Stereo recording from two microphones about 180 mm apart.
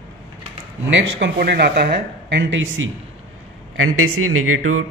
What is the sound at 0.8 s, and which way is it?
A man's voice, 80° right.